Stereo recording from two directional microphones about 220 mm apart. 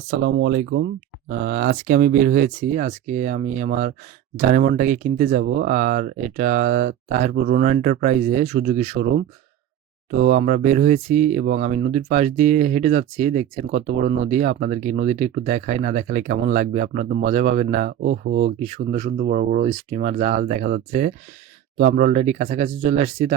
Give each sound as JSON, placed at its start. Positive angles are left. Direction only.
{"t": 0.1, "sound": "speech", "side_deg": -50}
{"t": 1.3, "sound": "speech", "side_deg": -40}
{"t": 10.1, "sound": "speech", "side_deg": -35}